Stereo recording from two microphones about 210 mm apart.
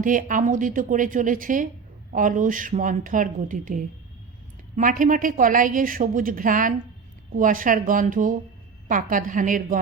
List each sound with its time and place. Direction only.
0.0 s a woman's voice: 40° right (ahead or behind)